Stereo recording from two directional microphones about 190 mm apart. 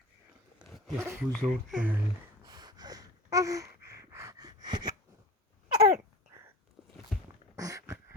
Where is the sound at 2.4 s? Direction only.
20° right (ahead or behind).